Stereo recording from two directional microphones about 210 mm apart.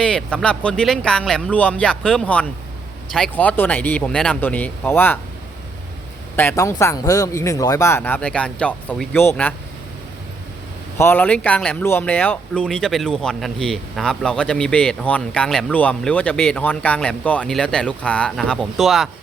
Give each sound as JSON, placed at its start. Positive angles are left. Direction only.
{"t": 0.0, "sound": "speech", "side_deg": 5}
{"t": 6.3, "sound": "speech", "side_deg": 10}
{"t": 10.9, "sound": "speech", "side_deg": 10}